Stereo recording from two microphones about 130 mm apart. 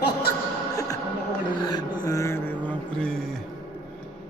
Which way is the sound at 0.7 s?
25° left (ahead or behind).